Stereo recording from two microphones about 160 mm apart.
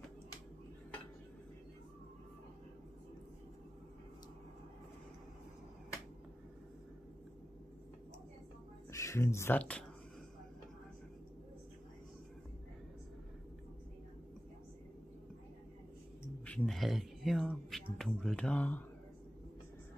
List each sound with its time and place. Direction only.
8.9 s speech: 20° left (ahead or behind)
16.4 s speech: 5° left (ahead or behind)